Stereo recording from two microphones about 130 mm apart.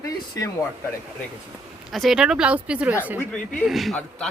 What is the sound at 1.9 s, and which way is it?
Speech, centre (ahead or behind).